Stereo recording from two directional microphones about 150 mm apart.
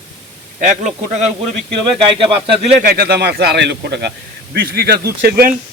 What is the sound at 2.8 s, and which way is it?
Speech, 90° right.